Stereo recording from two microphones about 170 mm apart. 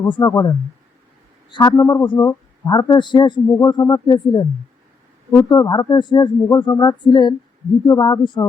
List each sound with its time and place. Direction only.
0.1 s speech: 20° left (ahead or behind)
5.5 s speech: 25° left (ahead or behind)